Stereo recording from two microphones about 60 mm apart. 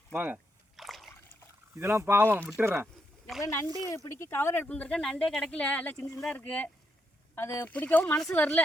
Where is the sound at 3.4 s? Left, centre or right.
Left.